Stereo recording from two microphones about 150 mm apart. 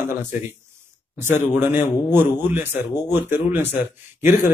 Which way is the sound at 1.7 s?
15° right (ahead or behind).